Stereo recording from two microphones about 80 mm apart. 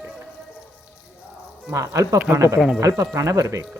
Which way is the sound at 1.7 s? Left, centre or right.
Right.